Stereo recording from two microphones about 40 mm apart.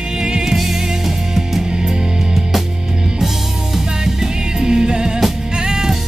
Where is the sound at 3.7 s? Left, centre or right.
Centre.